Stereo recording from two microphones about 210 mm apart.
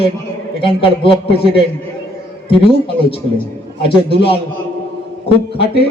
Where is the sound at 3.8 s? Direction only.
25° left (ahead or behind).